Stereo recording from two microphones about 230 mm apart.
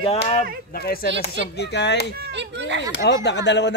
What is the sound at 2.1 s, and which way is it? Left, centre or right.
Speech, right.